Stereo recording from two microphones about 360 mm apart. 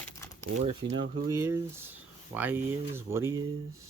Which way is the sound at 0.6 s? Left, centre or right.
Centre.